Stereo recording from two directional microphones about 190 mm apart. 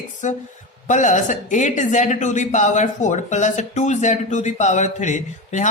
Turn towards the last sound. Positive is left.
turn(degrees=40)  # may be behind; listen again after turning